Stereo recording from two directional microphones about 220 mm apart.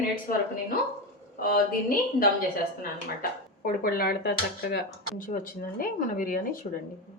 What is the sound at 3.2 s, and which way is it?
A woman's voice, 40° left (ahead or behind).